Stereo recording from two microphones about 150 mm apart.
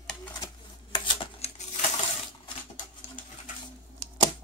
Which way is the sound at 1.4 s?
45° left (ahead or behind).